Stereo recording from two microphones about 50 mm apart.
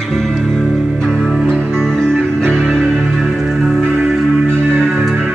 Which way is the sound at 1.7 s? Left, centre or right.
Centre.